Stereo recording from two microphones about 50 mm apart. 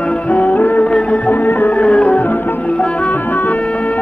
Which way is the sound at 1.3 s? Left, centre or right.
Left.